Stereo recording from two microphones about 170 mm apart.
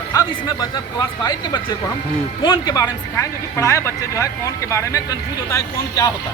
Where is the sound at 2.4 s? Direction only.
25° left (ahead or behind).